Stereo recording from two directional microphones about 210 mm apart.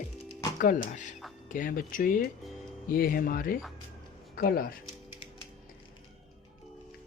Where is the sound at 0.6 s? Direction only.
40° left (ahead or behind).